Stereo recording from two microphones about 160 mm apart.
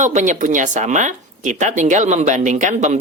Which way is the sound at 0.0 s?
50° right (ahead or behind).